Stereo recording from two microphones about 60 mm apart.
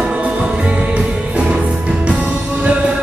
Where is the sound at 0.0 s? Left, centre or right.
Centre.